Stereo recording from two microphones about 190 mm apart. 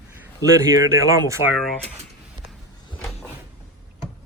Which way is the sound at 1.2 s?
15° right (ahead or behind).